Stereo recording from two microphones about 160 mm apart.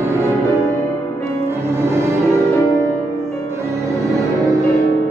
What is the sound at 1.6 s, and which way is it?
Music, 15° right (ahead or behind).